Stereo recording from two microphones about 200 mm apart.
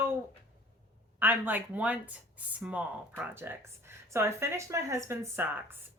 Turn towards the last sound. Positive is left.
turn(degrees=-10)  # may be behind; listen again after turning